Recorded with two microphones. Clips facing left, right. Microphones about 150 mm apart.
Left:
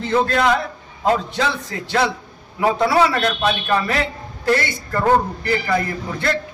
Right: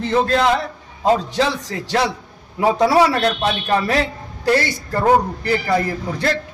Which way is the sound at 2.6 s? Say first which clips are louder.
Right 2 dB; 15° right (ahead or behind).